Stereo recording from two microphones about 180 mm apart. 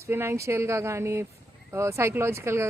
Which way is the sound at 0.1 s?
15° right (ahead or behind).